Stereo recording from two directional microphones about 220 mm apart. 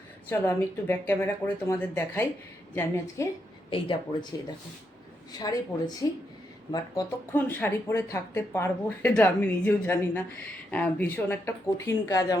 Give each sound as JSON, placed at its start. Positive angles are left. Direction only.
{"t": 0.3, "sound": "speech", "side_deg": 10}
{"t": 3.7, "sound": "speech", "side_deg": 25}
{"t": 5.4, "sound": "speech", "side_deg": 15}